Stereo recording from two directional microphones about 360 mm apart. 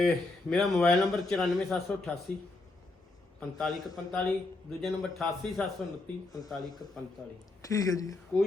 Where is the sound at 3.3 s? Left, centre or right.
Centre.